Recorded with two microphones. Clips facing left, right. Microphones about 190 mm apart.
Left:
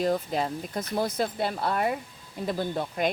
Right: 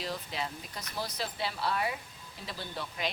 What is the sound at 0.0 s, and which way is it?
Speech, 45° left (ahead or behind).